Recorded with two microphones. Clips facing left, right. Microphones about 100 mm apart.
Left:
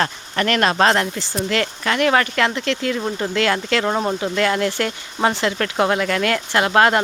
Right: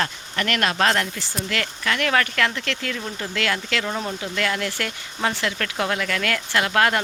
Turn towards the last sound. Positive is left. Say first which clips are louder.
# left 5 dB
turn(degrees=30)  # may be behind; listen again after turning